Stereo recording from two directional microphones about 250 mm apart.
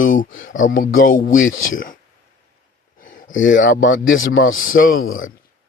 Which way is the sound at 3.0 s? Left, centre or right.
Left.